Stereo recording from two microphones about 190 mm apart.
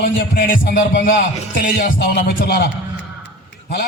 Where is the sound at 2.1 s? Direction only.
60° left (ahead or behind).